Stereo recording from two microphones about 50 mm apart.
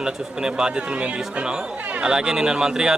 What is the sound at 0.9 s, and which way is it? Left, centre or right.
Speech, right.